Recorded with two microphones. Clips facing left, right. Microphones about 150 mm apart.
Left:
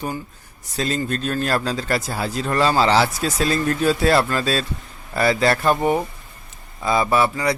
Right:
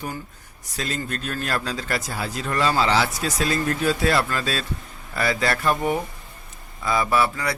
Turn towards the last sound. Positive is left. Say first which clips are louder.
# left 3 dB
turn(degrees=25)  # may be behind; listen again after turning